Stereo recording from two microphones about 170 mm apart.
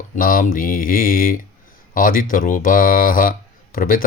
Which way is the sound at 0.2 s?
55° left (ahead or behind).